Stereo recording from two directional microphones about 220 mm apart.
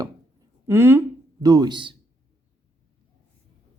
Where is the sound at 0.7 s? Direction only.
10° right (ahead or behind).